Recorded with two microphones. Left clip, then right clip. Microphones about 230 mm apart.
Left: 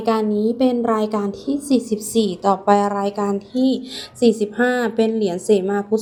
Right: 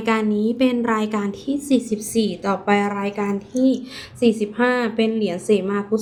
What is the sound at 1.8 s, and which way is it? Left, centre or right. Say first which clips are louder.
Speech: left 2 dB; centre.